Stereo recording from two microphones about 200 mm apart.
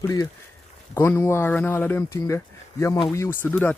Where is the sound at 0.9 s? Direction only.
15° left (ahead or behind).